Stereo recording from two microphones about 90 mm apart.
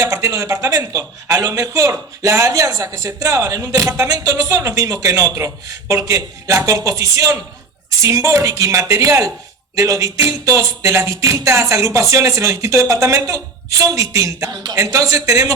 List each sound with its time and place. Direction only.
0.0 s a man's voice: 35° right (ahead or behind)